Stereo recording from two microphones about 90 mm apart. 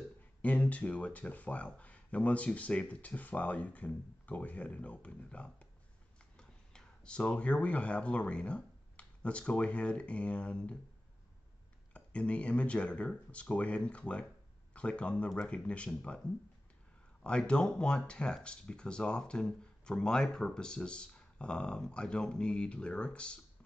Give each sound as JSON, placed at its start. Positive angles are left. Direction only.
{"t": 0.4, "sound": "speech", "side_deg": 15}
{"t": 11.9, "sound": "speech", "side_deg": 15}
{"t": 17.2, "sound": "speech", "side_deg": 10}